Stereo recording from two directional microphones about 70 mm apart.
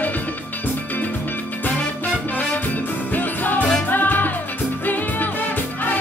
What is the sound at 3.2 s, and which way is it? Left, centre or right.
Music, left.